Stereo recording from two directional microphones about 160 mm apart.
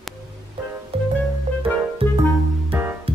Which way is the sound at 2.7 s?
10° right (ahead or behind).